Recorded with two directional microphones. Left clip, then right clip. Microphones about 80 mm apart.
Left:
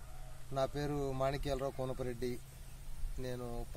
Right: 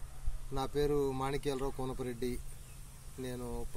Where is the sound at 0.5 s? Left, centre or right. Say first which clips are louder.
Right 4 dB; left.